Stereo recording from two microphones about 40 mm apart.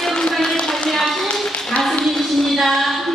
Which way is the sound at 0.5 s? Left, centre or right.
Centre.